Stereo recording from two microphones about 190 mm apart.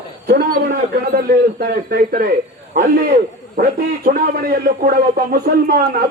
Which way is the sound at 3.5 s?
55° right (ahead or behind).